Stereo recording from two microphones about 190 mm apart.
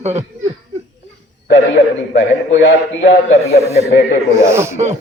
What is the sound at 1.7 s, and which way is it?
A man's voice, 70° left (ahead or behind).